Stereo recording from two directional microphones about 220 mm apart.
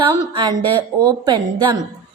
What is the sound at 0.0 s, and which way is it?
A woman's voice, 20° right (ahead or behind).